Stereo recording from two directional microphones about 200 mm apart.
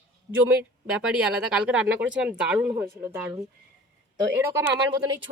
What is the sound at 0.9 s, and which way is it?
A woman's voice, 5° right (ahead or behind).